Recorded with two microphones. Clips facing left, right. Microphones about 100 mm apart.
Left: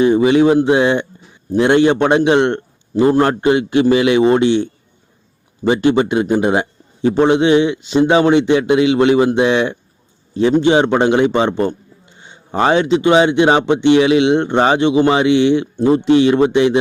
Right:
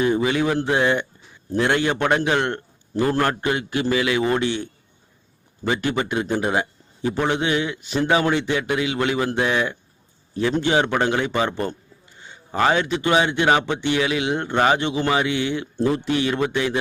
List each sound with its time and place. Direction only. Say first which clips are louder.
0.0 s a man's voice: left 9 dB; 20° left (ahead or behind)